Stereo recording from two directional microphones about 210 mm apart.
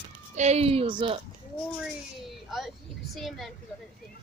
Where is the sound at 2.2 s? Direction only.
Centre (ahead or behind).